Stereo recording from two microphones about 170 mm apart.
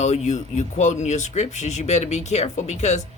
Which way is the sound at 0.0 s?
40° left (ahead or behind).